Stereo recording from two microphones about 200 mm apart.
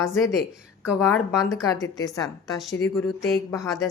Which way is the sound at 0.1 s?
15° left (ahead or behind).